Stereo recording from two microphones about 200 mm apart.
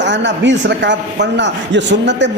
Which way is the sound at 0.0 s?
60° right (ahead or behind).